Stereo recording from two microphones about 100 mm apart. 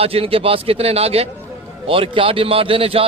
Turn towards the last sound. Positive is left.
turn(degrees=-70)  # may be behind; listen again after turning